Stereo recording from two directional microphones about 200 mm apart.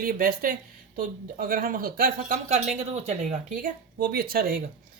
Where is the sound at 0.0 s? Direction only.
45° right (ahead or behind).